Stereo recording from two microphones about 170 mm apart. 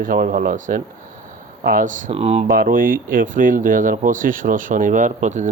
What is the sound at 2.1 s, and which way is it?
Speech, 35° right (ahead or behind).